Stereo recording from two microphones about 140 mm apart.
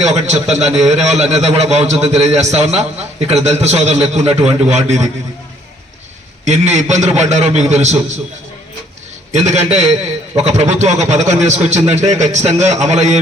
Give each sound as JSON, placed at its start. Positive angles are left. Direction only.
{"t": 0.0, "sound": "a man's voice", "side_deg": -50}
{"t": 6.4, "sound": "a man's voice", "side_deg": -55}
{"t": 9.3, "sound": "a man's voice", "side_deg": -55}